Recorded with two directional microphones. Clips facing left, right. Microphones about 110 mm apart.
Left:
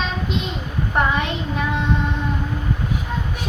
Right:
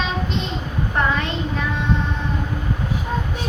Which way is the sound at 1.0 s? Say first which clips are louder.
Left 1 dB; 15° left (ahead or behind).